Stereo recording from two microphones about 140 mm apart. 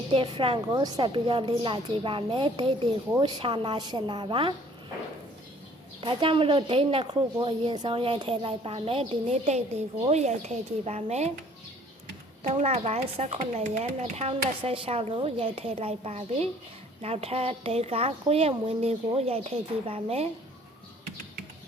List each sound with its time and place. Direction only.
0.1 s speech: 40° right (ahead or behind)
0.7 s speech: 30° right (ahead or behind)
6.0 s speech: 35° right (ahead or behind)
12.4 s a woman's voice: 50° right (ahead or behind)